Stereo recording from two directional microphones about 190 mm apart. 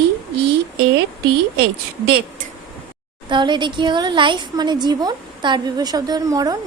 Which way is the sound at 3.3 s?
25° right (ahead or behind).